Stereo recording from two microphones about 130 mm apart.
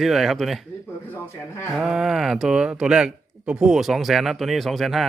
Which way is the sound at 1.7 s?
Centre (ahead or behind).